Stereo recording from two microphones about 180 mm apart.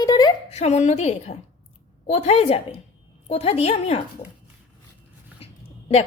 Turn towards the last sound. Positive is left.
turn(degrees=35)  # may be behind; listen again after turning